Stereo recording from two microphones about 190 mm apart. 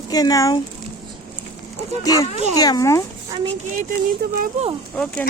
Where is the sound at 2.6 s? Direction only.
20° left (ahead or behind).